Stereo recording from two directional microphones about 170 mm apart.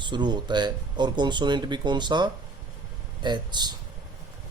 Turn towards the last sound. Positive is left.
turn(degrees=-25)  # may be behind; listen again after turning